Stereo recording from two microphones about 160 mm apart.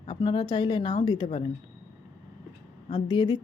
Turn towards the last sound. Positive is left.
turn(degrees=30)  # may be behind; listen again after turning